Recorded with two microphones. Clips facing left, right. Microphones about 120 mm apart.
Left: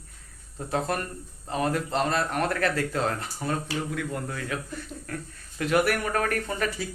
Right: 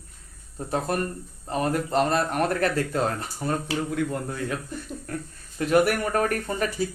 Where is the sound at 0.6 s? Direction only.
20° right (ahead or behind).